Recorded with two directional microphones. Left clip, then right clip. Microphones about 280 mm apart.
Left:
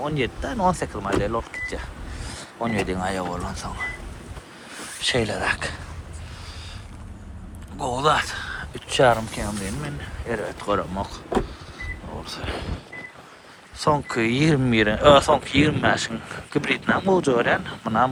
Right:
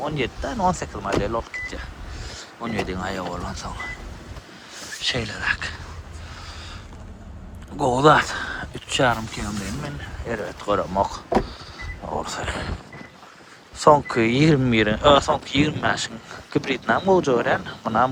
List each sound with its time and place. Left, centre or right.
0.0 s speech: centre
4.9 s speech: centre
7.9 s speech: right; by 11.0 s centre
11.0 s speech: right
13.9 s speech: centre